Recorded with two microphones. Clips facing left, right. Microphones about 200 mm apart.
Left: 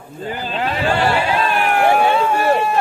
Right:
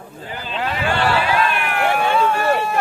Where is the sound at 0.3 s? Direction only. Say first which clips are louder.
Left 3 dB; 40° left (ahead or behind).